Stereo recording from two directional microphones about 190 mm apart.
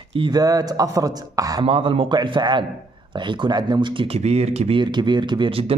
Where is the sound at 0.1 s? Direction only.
25° right (ahead or behind).